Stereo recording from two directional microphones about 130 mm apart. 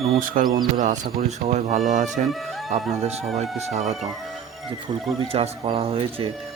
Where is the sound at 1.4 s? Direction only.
60° right (ahead or behind).